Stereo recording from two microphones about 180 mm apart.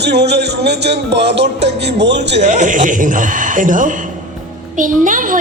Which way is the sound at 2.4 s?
45° right (ahead or behind).